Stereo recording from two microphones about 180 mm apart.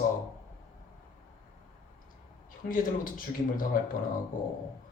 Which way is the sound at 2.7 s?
50° left (ahead or behind).